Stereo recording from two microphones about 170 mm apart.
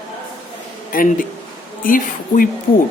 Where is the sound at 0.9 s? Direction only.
55° left (ahead or behind).